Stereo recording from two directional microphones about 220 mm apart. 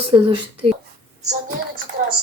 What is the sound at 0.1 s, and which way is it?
Speech, 20° right (ahead or behind).